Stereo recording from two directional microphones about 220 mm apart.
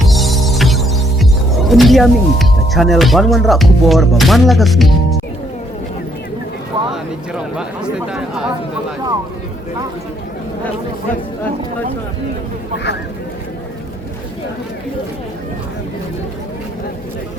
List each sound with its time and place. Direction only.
0.0 s music: centre (ahead or behind)
6.9 s speech: 5° right (ahead or behind)